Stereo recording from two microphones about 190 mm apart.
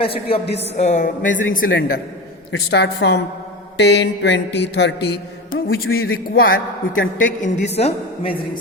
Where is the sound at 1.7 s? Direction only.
55° left (ahead or behind).